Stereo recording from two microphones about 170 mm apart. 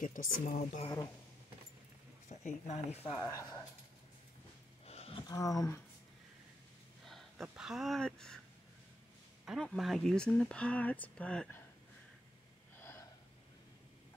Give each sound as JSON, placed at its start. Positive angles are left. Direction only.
{"t": 0.0, "sound": "a woman's voice", "side_deg": 50}
{"t": 2.2, "sound": "speech", "side_deg": 45}
{"t": 3.2, "sound": "speech", "side_deg": 15}
{"t": 4.8, "sound": "roaring cats", "side_deg": 35}
{"t": 5.3, "sound": "speech", "side_deg": 20}
{"t": 7.1, "sound": "speech", "side_deg": 0}
{"t": 9.5, "sound": "speech", "side_deg": 0}
{"t": 12.7, "sound": "gasp", "side_deg": 15}